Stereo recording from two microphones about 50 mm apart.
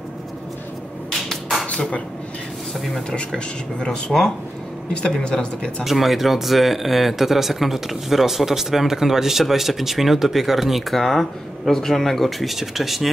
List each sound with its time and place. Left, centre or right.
1.3 s a sound: centre
1.7 s speech: left
3.8 s speech: centre
5.9 s speech: centre